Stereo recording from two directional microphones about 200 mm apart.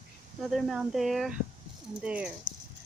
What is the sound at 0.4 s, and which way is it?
Speech, centre (ahead or behind).